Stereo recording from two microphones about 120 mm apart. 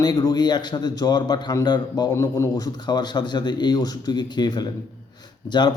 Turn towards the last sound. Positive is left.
turn(degrees=40)  # may be behind; listen again after turning